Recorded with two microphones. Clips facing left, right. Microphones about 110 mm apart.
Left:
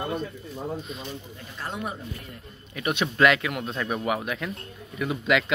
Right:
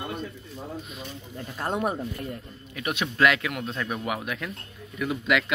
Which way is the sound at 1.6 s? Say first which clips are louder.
Right 6 dB; 45° right (ahead or behind).